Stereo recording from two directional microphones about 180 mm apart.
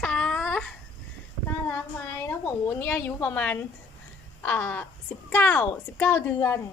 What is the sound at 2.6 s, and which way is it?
A woman's voice, 15° left (ahead or behind).